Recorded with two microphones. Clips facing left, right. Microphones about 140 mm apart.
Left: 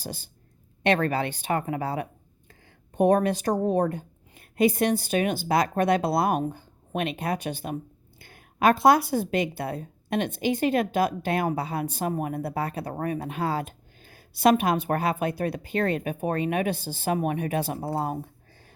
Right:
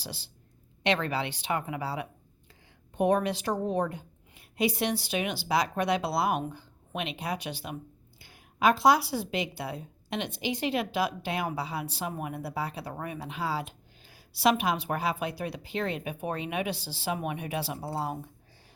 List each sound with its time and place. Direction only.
0.0 s speech: 45° left (ahead or behind)